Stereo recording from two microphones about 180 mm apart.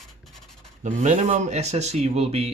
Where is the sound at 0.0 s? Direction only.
Centre (ahead or behind).